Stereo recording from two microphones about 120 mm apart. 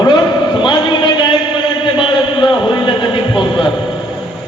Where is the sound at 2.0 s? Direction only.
45° left (ahead or behind).